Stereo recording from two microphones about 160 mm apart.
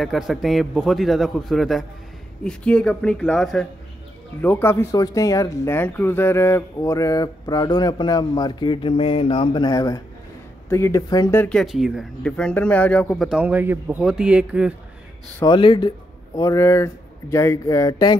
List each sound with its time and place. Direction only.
0.0 s a man's voice: centre (ahead or behind)
13.4 s speech: 10° right (ahead or behind)
15.4 s speech: 30° left (ahead or behind)